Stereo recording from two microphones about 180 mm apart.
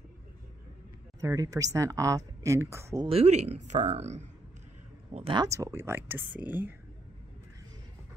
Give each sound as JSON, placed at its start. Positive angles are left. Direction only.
{"t": 1.2, "sound": "speech", "side_deg": -20}
{"t": 3.1, "sound": "speech", "side_deg": -35}